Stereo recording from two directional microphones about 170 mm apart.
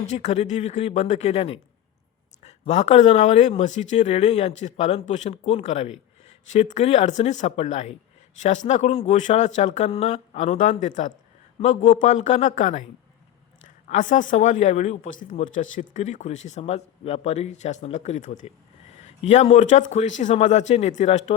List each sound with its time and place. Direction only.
0.1 s speech: 40° left (ahead or behind)